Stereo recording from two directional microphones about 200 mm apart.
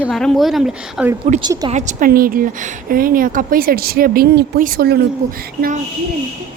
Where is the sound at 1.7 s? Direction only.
45° right (ahead or behind).